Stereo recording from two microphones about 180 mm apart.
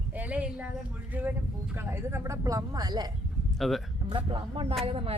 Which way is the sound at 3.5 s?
Centre (ahead or behind).